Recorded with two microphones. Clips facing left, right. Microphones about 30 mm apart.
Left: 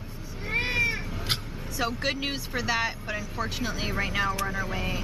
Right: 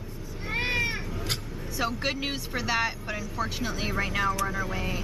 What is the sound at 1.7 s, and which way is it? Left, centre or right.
Speech, centre.